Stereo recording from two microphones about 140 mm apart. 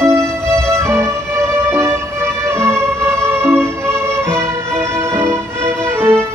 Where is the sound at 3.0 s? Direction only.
20° right (ahead or behind).